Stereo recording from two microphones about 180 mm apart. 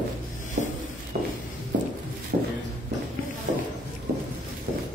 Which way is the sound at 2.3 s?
55° right (ahead or behind).